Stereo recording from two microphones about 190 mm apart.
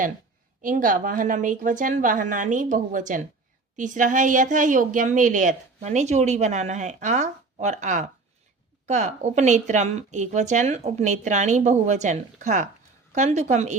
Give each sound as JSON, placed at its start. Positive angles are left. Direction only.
{"t": 0.6, "sound": "a woman's voice", "side_deg": -45}